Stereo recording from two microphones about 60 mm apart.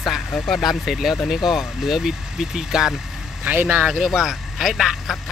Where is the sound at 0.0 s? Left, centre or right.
Centre.